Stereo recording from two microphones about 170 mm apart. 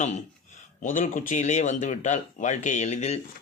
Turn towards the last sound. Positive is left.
turn(degrees=40)  # may be behind; listen again after turning